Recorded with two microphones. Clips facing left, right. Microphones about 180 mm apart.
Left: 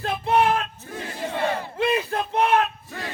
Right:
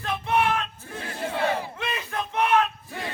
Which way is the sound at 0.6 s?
5° left (ahead or behind).